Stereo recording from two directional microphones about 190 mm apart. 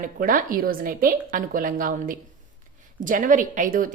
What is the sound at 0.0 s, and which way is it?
A woman's voice, 45° right (ahead or behind).